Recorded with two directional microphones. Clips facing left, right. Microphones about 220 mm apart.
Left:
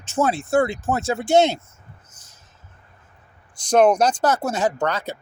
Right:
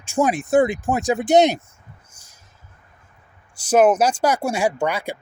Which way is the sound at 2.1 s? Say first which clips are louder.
Left 1 dB; 10° right (ahead or behind).